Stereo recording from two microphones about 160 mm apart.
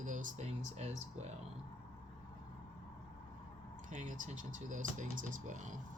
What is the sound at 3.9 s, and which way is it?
Speech, 50° right (ahead or behind).